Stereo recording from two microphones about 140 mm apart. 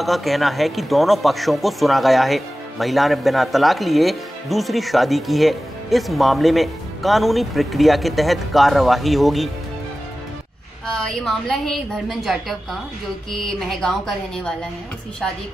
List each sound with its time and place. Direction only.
0.0 s a man's voice: centre (ahead or behind)
10.9 s a man's voice: 5° left (ahead or behind)